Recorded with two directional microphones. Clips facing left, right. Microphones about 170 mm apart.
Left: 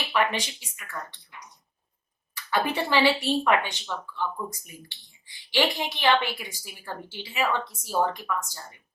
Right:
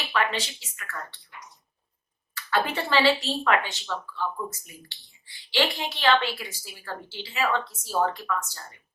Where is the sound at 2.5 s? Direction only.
15° left (ahead or behind).